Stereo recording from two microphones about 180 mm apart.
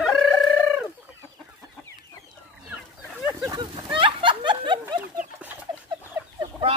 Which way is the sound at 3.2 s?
10° right (ahead or behind).